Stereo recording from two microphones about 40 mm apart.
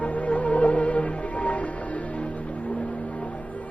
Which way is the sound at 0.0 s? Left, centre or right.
Left.